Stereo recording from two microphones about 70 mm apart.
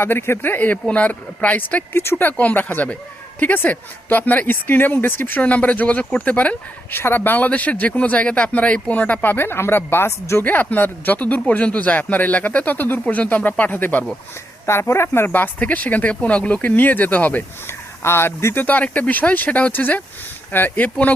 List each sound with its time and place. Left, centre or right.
0.0 s speech: left
0.9 s speech: centre
2.3 s speech: left
10.4 s speech: left
14.7 s speech: left
18.0 s speech: left
18.6 s speech: left